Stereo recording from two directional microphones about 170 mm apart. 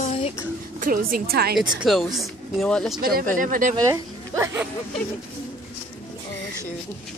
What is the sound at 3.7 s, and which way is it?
Speech, 20° right (ahead or behind).